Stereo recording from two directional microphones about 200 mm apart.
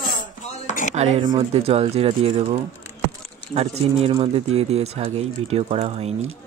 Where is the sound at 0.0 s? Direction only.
40° left (ahead or behind).